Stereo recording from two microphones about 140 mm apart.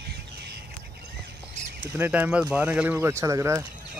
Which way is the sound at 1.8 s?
15° right (ahead or behind).